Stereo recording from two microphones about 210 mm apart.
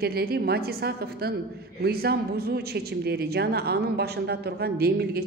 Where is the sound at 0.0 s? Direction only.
50° right (ahead or behind).